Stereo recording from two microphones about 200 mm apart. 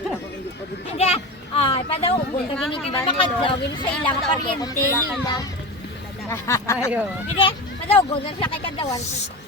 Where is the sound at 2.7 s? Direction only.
25° left (ahead or behind).